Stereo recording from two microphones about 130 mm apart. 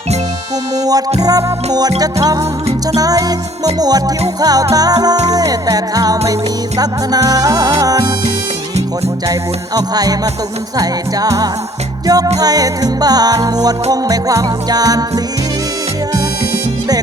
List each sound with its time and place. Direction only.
0.8 s music: 30° right (ahead or behind)
9.2 s music: 25° right (ahead or behind)